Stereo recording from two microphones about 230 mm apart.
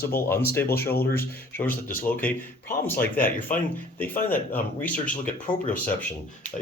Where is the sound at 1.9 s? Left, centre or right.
Centre.